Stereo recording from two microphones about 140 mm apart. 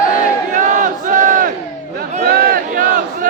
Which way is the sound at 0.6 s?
65° right (ahead or behind).